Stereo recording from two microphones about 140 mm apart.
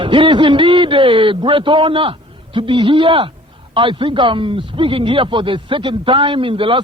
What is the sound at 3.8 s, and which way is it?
A man's voice, 40° right (ahead or behind).